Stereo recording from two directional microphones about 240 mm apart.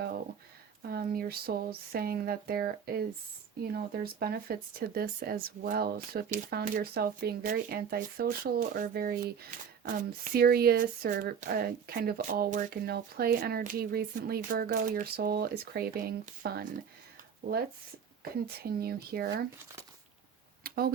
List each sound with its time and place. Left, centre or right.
0.8 s speech: right
18.2 s speech: right
20.7 s a sound: right